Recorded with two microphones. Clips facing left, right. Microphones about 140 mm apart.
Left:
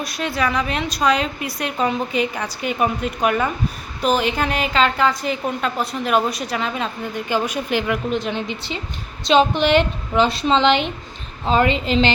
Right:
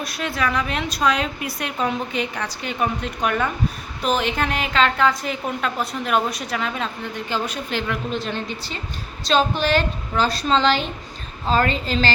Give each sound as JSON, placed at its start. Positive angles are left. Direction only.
{"t": 0.0, "sound": "a woman's voice", "side_deg": 0}